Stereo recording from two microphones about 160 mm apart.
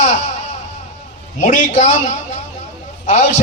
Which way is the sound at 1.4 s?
50° left (ahead or behind).